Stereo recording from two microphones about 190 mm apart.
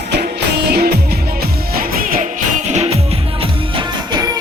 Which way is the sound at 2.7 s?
35° right (ahead or behind).